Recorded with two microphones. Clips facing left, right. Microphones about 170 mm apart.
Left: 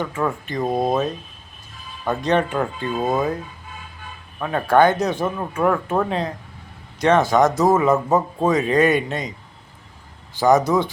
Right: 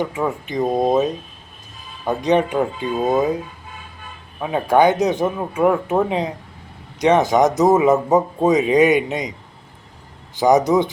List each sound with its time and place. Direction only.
0.0 s speech: 15° right (ahead or behind)
4.4 s speech: 15° right (ahead or behind)
10.3 s speech: 20° right (ahead or behind)